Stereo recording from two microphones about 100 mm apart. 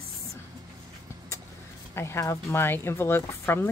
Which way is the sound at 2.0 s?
30° left (ahead or behind).